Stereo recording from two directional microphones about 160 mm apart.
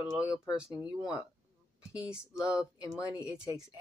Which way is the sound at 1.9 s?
5° right (ahead or behind).